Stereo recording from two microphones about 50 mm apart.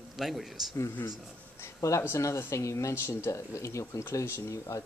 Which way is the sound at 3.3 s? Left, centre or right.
Left.